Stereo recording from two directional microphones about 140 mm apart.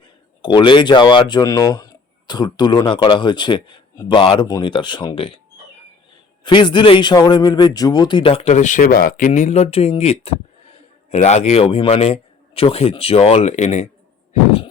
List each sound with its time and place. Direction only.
0.4 s speech: 35° left (ahead or behind)
6.4 s a man's voice: 35° left (ahead or behind); by 13.8 s 55° left (ahead or behind)